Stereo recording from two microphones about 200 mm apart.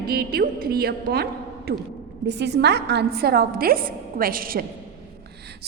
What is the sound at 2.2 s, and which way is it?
A woman's voice, 60° right (ahead or behind).